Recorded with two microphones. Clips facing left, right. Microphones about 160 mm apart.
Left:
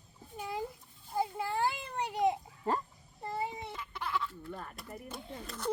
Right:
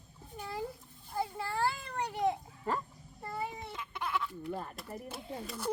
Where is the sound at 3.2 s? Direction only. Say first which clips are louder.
Left 2 dB; 20° left (ahead or behind).